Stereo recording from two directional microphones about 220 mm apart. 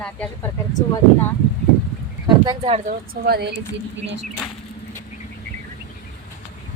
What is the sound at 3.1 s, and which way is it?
Speech, 45° right (ahead or behind).